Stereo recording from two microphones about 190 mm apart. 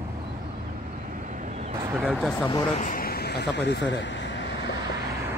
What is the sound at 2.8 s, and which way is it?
Speech, 45° left (ahead or behind).